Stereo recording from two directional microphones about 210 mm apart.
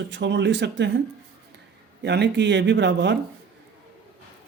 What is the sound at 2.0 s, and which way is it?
Speech, 55° right (ahead or behind).